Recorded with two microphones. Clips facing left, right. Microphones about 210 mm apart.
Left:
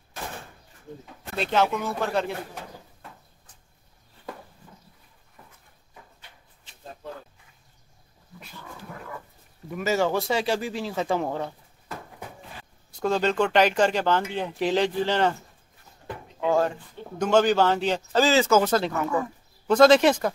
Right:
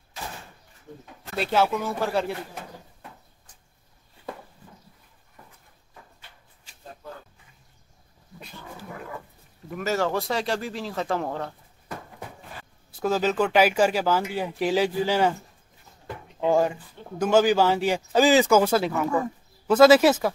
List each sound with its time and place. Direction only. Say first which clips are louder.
1.3 s speech: right 1 dB; 5° right (ahead or behind)
9.7 s speech: left 2 dB; centre (ahead or behind)
13.0 s speech: even; 5° right (ahead or behind)
16.3 s speech: right 1 dB; 15° right (ahead or behind)